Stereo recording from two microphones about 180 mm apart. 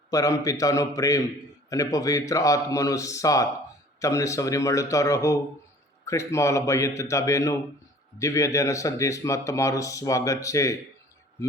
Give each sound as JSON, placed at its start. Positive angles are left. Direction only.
{"t": 0.1, "sound": "speech", "side_deg": 20}